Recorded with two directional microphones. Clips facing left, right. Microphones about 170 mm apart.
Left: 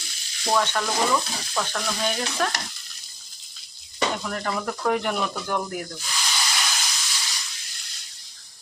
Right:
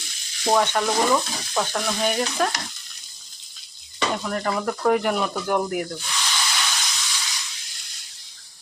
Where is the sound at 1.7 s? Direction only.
10° right (ahead or behind).